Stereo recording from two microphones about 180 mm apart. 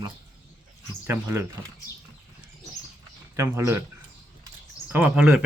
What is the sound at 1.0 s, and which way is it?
Speech, 15° right (ahead or behind).